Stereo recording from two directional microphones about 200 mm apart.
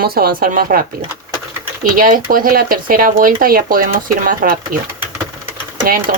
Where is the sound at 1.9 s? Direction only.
45° right (ahead or behind).